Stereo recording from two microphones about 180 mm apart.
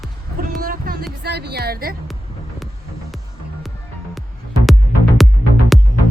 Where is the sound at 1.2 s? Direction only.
65° right (ahead or behind).